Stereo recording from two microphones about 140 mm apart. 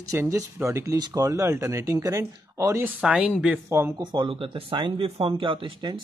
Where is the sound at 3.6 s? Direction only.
15° right (ahead or behind).